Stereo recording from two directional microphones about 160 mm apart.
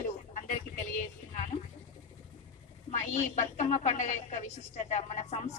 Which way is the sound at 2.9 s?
45° left (ahead or behind).